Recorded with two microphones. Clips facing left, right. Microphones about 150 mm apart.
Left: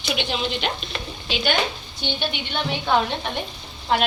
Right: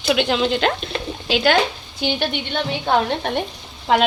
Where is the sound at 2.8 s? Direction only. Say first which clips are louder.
Right 3 dB; 45° right (ahead or behind).